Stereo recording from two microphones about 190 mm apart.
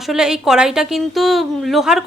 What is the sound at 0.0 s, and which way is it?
A woman's voice, 5° right (ahead or behind).